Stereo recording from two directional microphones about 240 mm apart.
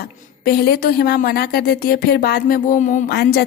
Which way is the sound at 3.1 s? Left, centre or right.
Left.